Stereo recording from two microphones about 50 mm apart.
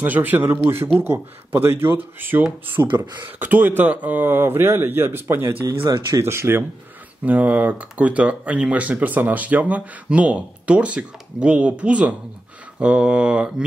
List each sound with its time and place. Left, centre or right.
0.0 s a man's voice: right
0.5 s a man's voice: right
5.7 s speech: right
7.2 s speech: right